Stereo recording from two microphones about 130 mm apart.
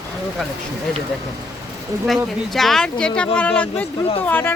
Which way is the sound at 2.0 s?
Centre (ahead or behind).